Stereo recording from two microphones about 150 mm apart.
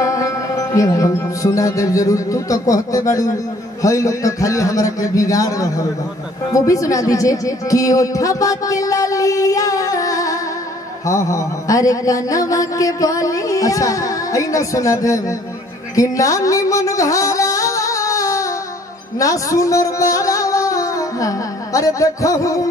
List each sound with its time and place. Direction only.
0.0 s music: 20° left (ahead or behind)
3.8 s mantra: 20° left (ahead or behind)
6.5 s speech: 20° left (ahead or behind)
11.1 s mantra: 20° left (ahead or behind)
16.0 s music: 20° left (ahead or behind)